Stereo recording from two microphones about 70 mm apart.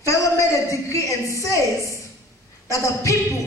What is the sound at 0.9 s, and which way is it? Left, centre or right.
Speech, left.